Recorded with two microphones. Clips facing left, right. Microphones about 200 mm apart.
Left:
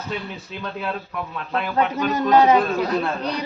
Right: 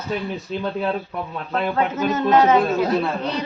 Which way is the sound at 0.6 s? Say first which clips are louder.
Right 4 dB; 30° right (ahead or behind).